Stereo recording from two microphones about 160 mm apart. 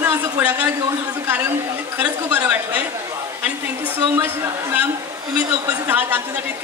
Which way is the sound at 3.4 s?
10° right (ahead or behind).